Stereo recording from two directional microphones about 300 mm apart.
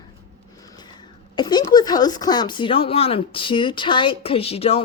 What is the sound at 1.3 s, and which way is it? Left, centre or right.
Speech, centre.